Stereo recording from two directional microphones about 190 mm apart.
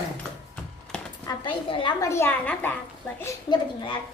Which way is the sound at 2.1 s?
10° left (ahead or behind).